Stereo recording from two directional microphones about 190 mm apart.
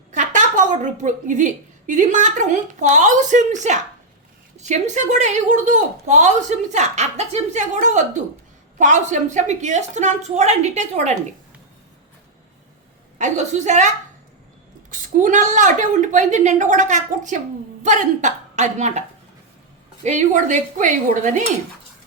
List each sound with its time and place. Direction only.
0.1 s a woman's voice: 40° right (ahead or behind)
13.1 s a woman's voice: 40° right (ahead or behind)
20.1 s a woman's voice: 40° right (ahead or behind)